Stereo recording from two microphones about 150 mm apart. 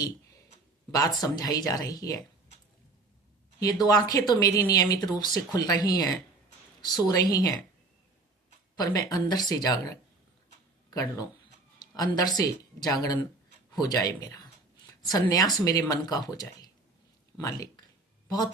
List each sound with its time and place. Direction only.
0.9 s speech: 25° left (ahead or behind)
3.6 s speech: 25° left (ahead or behind)
8.8 s speech: 25° left (ahead or behind)
11.8 s a woman's voice: 25° left (ahead or behind)